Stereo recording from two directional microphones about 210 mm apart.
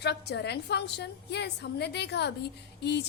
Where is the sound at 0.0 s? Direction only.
55° left (ahead or behind).